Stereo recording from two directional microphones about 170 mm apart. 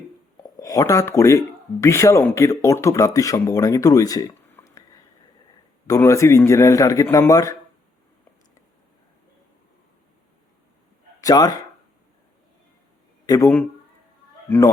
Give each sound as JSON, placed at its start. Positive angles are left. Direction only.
{"t": 0.4, "sound": "speech", "side_deg": 20}
{"t": 5.9, "sound": "a man's voice", "side_deg": 15}
{"t": 11.2, "sound": "speech", "side_deg": 20}
{"t": 13.2, "sound": "a man's voice", "side_deg": 20}